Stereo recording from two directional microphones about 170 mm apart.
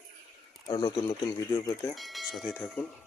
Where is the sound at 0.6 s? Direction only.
25° left (ahead or behind).